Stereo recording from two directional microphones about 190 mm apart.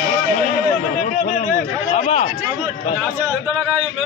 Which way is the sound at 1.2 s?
40° left (ahead or behind).